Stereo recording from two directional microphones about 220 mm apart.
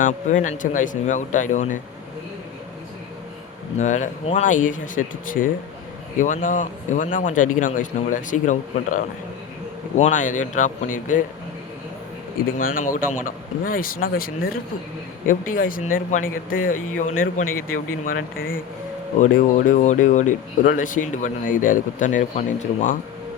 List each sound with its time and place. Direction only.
0.0 s speech: 35° left (ahead or behind)
3.8 s speech: 30° left (ahead or behind)
12.5 s speech: 40° left (ahead or behind)